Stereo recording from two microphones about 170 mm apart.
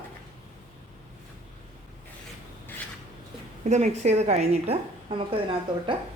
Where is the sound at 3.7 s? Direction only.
40° right (ahead or behind).